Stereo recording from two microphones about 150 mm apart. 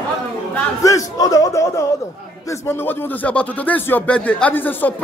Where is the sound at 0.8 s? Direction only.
25° left (ahead or behind).